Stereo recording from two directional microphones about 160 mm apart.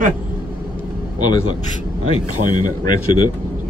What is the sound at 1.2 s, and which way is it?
Speech, 30° left (ahead or behind).